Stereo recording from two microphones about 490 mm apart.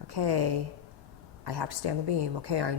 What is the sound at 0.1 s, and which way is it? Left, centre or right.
Speech, right.